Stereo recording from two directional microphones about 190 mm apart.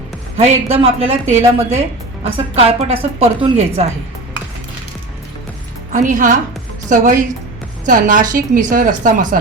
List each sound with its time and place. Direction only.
0.3 s a woman's voice: 30° right (ahead or behind)
5.9 s speech: 40° right (ahead or behind)